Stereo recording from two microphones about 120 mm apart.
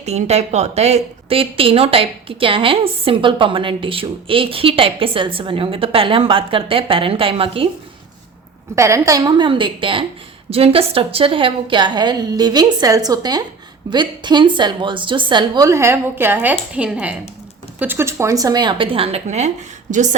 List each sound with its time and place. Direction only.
0.0 s a woman's voice: 65° right (ahead or behind)
8.7 s a woman's voice: 25° right (ahead or behind); by 15.6 s 40° right (ahead or behind)
15.6 s a woman's voice: 25° right (ahead or behind); by 19.5 s 65° right (ahead or behind)
19.9 s a woman's voice: 90° right